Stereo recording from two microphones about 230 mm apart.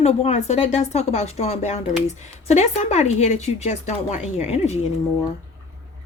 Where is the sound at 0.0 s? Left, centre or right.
Left.